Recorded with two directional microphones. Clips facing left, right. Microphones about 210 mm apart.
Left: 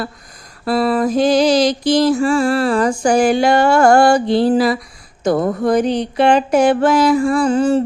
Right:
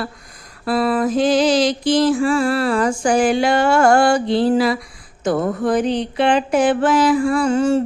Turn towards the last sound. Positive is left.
turn(degrees=35)  # may be behind; listen again after turning